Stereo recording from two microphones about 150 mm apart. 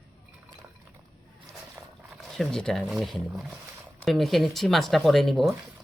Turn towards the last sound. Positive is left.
turn(degrees=0)  # may be behind; listen again after turning